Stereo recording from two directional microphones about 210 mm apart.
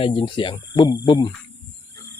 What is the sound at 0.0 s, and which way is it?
Speech, 25° left (ahead or behind).